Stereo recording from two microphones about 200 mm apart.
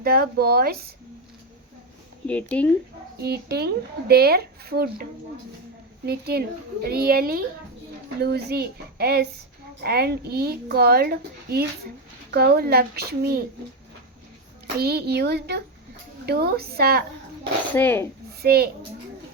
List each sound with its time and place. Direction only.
0.0 s a child's voice: 50° right (ahead or behind)
2.2 s speech: 5° left (ahead or behind)
3.2 s a child's voice: 55° right (ahead or behind)
6.1 s a child's voice: 50° right (ahead or behind)
14.8 s a child's voice: 55° right (ahead or behind)
17.7 s speech: 10° left (ahead or behind)
18.4 s a child's voice: 50° right (ahead or behind)